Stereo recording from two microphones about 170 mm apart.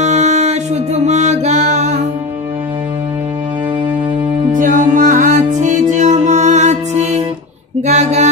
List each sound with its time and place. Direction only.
0.0 s music: 40° right (ahead or behind)
4.5 s music: 50° right (ahead or behind)
7.8 s a sound: 40° right (ahead or behind)